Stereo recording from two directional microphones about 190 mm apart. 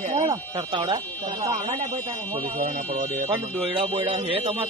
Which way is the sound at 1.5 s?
40° right (ahead or behind).